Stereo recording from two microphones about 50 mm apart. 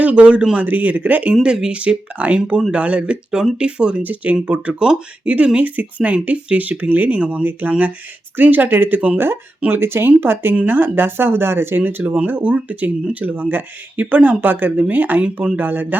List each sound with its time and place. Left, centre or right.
0.0 s a man's voice: right
1.3 s speech: centre
1.8 s speech: right
9.1 s speech: right
12.0 s speech: right